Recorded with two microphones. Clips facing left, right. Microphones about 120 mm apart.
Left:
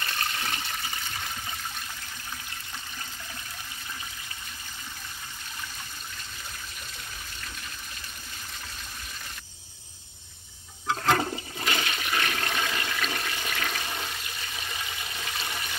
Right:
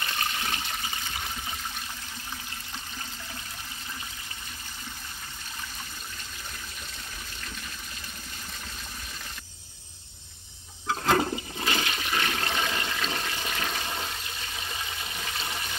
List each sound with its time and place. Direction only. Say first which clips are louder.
0.0 s toilet flush: right 1 dB; 15° right (ahead or behind)
11.1 s toilet flush: right 3 dB; 25° right (ahead or behind)
15.1 s toilet flush: even; 20° right (ahead or behind)